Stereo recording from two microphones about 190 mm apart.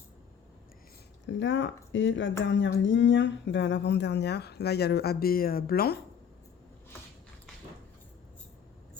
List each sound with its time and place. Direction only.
1.3 s speech: 75° left (ahead or behind); by 6.0 s 55° left (ahead or behind)